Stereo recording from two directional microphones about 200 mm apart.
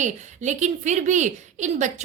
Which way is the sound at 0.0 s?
35° right (ahead or behind).